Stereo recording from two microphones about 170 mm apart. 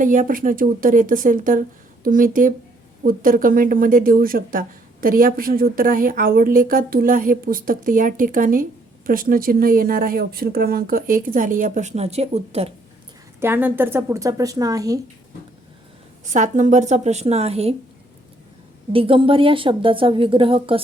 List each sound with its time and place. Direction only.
0.0 s speech: 50° right (ahead or behind)
13.4 s a woman's voice: 10° right (ahead or behind)
16.2 s speech: 45° right (ahead or behind)
18.9 s a woman's voice: 30° right (ahead or behind)